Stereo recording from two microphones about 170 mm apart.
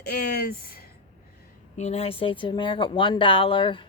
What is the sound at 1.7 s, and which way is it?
Speech, 40° left (ahead or behind).